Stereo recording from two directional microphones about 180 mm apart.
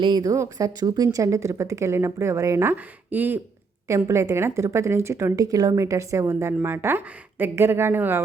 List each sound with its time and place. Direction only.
0.0 s a woman's voice: 20° right (ahead or behind)